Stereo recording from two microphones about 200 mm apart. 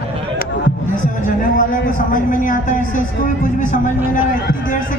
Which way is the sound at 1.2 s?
40° left (ahead or behind).